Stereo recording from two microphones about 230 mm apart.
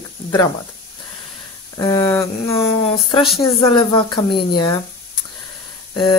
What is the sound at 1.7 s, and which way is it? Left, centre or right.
Speech, centre.